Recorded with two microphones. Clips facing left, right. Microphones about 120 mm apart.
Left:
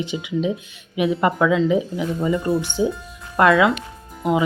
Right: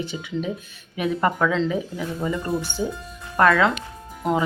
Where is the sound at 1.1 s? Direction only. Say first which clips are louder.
Left 2 dB; 5° left (ahead or behind).